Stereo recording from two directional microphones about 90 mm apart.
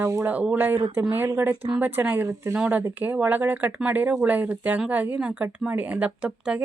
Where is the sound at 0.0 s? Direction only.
35° right (ahead or behind).